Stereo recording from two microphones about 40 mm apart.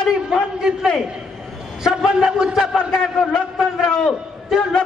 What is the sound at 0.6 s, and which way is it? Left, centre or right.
Speech, centre.